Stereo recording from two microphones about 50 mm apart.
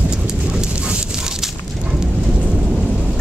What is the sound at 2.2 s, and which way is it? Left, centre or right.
Thunder, centre.